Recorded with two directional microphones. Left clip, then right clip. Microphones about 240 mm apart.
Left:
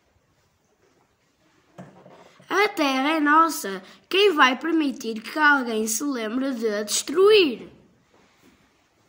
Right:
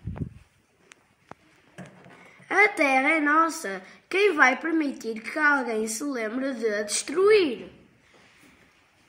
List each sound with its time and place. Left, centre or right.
2.4 s a woman's voice: left